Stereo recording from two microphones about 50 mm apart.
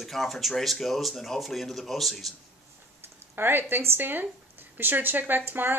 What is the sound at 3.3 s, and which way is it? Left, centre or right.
Speech, right.